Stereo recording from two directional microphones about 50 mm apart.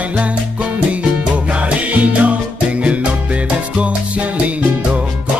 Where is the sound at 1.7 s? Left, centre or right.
Right.